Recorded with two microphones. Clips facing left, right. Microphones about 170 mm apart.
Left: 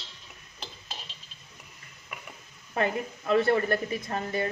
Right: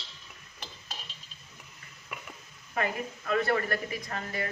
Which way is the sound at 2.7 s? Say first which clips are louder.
Left 3 dB; 30° left (ahead or behind).